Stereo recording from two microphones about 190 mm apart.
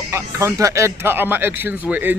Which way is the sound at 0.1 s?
15° right (ahead or behind).